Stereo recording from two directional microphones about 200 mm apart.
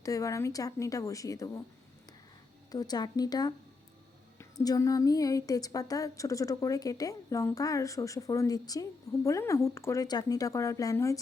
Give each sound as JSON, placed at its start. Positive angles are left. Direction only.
{"t": 0.0, "sound": "a woman's voice", "side_deg": 15}
{"t": 2.7, "sound": "a woman's voice", "side_deg": 20}